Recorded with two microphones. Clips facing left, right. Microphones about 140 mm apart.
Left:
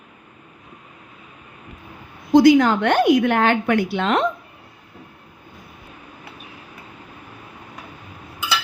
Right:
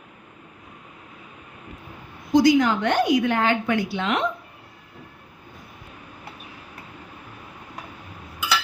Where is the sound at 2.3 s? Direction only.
60° left (ahead or behind).